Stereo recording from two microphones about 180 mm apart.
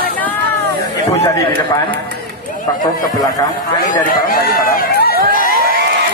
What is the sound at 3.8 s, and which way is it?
Speech, 50° left (ahead or behind).